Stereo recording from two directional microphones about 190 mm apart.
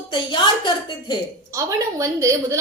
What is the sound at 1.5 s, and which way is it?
A woman's voice, 15° right (ahead or behind).